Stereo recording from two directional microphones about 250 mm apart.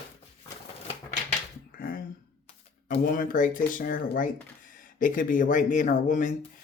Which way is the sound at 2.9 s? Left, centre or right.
Left.